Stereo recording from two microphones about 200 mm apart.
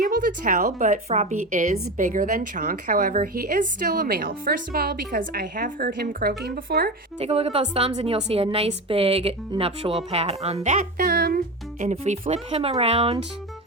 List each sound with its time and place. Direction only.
0.0 s a woman's voice: 45° right (ahead or behind)
7.2 s a woman's voice: 30° right (ahead or behind); by 11.3 s 45° right (ahead or behind)
11.8 s a woman's voice: 35° right (ahead or behind)